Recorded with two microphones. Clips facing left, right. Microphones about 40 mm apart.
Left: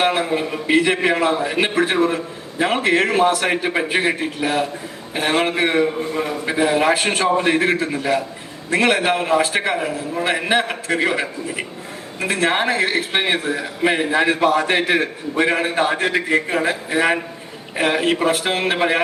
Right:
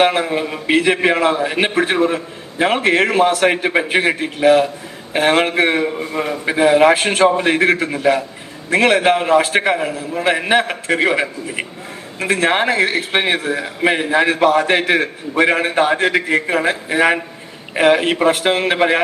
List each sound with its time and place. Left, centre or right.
0.0 s a man's voice: right
8.7 s a man's voice: right